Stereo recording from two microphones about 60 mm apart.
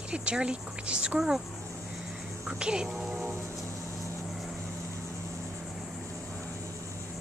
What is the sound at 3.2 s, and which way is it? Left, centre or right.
Music, right.